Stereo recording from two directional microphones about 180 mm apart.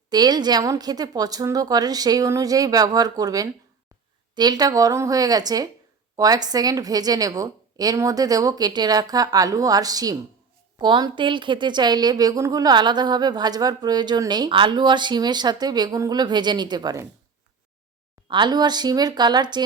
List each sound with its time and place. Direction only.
0.1 s a woman's voice: 20° right (ahead or behind)
18.3 s a woman's voice: 25° right (ahead or behind)